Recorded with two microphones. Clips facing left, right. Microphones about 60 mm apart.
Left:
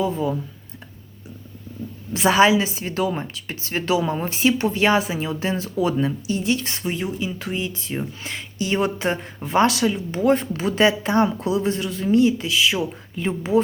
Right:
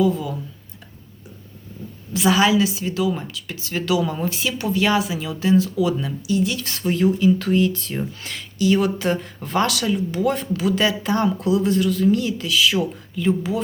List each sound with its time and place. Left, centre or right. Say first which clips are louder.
0.0 s a woman's voice: right 2 dB; left
2.1 s a woman's voice: left 1 dB; left